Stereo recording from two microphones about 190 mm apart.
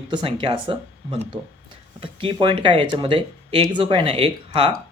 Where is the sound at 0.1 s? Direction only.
25° right (ahead or behind).